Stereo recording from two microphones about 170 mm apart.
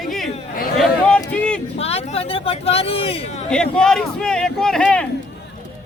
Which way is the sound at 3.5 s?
5° left (ahead or behind).